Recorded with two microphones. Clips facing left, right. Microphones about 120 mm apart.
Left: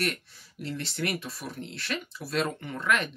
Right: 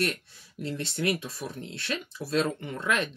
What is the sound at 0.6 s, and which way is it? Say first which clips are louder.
Speech: right 3 dB; 25° right (ahead or behind).